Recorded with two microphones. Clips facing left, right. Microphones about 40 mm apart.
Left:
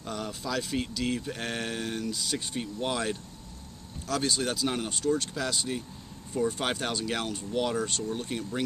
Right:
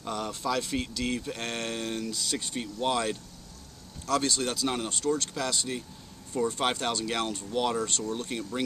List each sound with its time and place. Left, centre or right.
0.1 s speech: centre